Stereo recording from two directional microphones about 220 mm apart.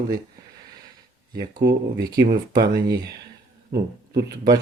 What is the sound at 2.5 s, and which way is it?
Speech, 15° right (ahead or behind).